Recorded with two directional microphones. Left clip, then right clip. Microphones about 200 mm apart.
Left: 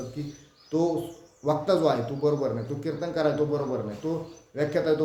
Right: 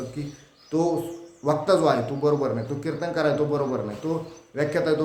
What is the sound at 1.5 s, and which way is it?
A man's voice, 10° right (ahead or behind).